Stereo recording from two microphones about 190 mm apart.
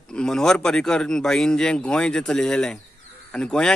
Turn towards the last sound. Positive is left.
turn(degrees=5)  # may be behind; listen again after turning